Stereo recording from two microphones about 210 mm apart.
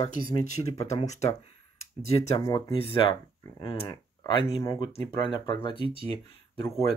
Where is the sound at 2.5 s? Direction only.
25° left (ahead or behind).